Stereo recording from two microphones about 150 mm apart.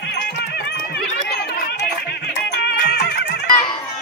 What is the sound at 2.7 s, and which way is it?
Music, 90° left.